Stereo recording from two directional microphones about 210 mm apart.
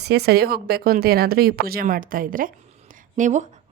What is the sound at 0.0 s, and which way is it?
A woman's voice, 50° right (ahead or behind).